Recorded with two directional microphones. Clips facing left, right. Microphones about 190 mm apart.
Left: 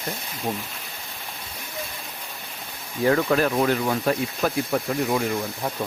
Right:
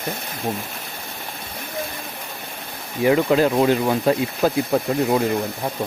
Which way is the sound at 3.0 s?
15° right (ahead or behind).